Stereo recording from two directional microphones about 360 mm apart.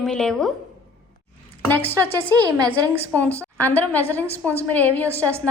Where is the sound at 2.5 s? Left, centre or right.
Centre.